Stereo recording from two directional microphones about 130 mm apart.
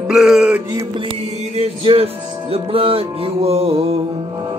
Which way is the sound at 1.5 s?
50° right (ahead or behind).